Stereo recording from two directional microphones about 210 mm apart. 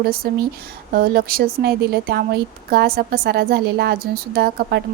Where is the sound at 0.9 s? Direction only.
45° right (ahead or behind).